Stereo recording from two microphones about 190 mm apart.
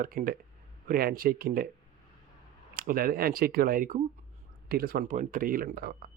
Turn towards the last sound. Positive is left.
turn(degrees=-50)  # may be behind; listen again after turning